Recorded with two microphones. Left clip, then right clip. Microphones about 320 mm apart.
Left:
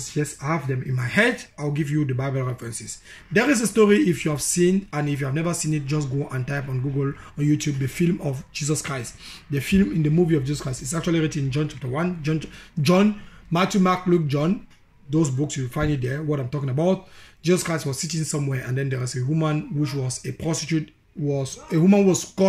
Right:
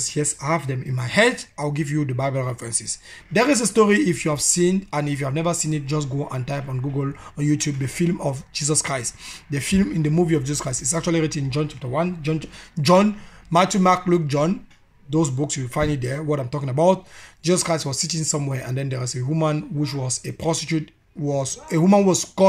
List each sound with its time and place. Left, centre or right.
0.0 s speech: centre